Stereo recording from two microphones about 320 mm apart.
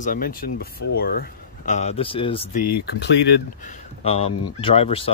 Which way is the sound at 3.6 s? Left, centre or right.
Left.